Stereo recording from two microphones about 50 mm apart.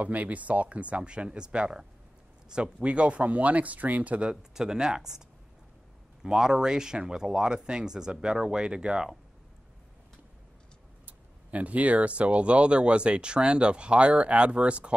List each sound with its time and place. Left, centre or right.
0.0 s speech: right
4.3 s speech: centre
6.2 s speech: centre
11.1 s speech: right